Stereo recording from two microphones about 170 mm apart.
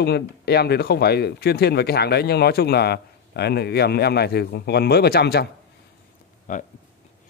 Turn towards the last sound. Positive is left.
turn(degrees=50)  # may be behind; listen again after turning